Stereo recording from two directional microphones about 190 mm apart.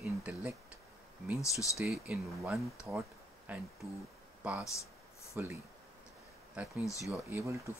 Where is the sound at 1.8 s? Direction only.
Centre (ahead or behind).